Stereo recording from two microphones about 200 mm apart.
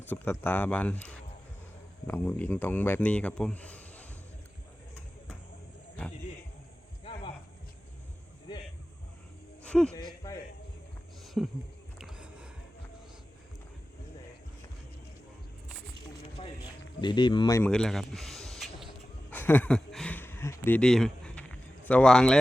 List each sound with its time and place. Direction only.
0.0 s speech: 10° left (ahead or behind)
9.6 s speech: 5° left (ahead or behind)
10.2 s music: 15° left (ahead or behind)
11.4 s speech: centre (ahead or behind)
11.9 s music: 5° right (ahead or behind)
17.0 s speech: 20° left (ahead or behind)
17.6 s speech: 5° left (ahead or behind)
19.3 s a sound: 10° left (ahead or behind)